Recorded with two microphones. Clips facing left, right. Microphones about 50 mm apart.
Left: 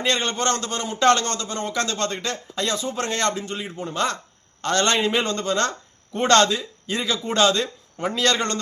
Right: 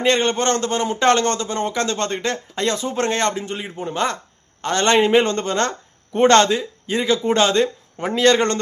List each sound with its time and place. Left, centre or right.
0.0 s a man's voice: right